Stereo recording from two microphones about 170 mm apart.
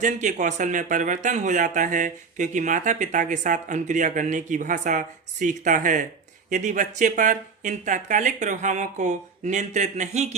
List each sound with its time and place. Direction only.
0.0 s speech: 50° right (ahead or behind)